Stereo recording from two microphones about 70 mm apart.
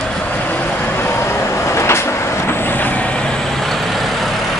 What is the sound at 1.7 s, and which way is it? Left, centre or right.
Vehicle, left.